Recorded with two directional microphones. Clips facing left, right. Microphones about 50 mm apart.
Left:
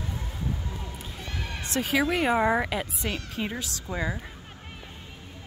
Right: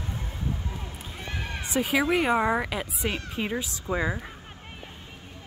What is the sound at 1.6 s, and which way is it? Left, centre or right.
Speech, centre.